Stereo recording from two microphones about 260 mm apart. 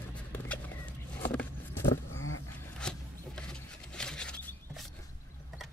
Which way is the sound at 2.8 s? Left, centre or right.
Centre.